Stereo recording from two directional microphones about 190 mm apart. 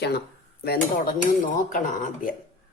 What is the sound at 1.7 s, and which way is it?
Speech, 45° left (ahead or behind).